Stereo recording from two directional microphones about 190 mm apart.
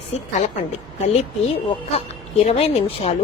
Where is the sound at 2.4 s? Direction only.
30° left (ahead or behind).